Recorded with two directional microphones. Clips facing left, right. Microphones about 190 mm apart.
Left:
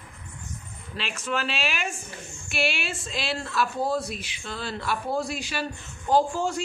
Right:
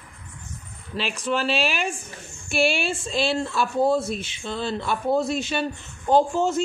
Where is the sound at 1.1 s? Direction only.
30° right (ahead or behind).